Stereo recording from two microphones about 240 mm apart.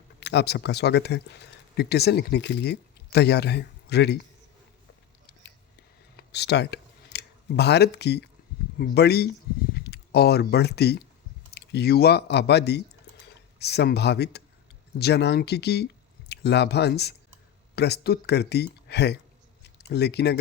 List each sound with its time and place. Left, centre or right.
0.2 s speech: left
6.3 s speech: left